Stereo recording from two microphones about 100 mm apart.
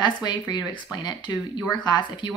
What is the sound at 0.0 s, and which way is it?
A woman's voice, 50° left (ahead or behind).